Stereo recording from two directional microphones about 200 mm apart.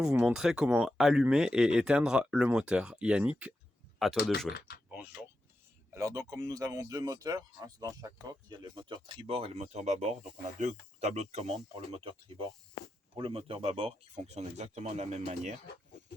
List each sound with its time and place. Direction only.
0.0 s speech: 5° right (ahead or behind)
3.9 s a sound: centre (ahead or behind)
5.9 s speech: 15° right (ahead or behind); by 15.5 s 35° right (ahead or behind)